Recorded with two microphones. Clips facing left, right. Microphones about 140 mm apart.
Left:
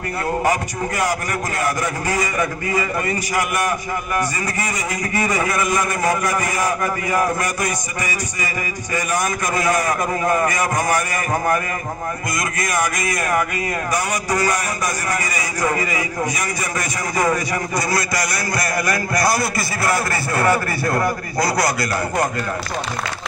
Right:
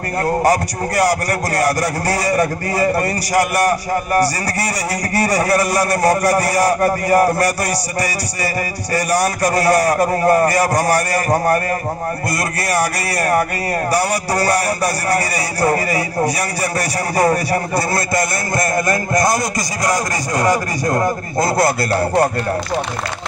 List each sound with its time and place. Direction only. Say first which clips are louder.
0.4 s a man's voice: right 4 dB; 35° right (ahead or behind)
8.9 s a man's voice: right 5 dB; 35° right (ahead or behind)
12.6 s a man's voice: right 3 dB; 35° right (ahead or behind)